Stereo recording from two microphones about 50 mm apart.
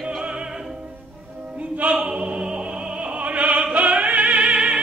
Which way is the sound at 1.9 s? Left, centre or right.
Right.